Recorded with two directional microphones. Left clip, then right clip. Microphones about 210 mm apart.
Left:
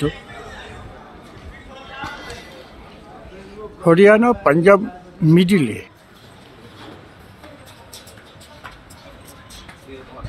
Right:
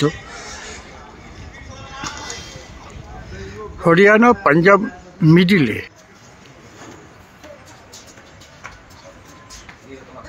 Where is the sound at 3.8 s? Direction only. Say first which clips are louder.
Even; 10° right (ahead or behind).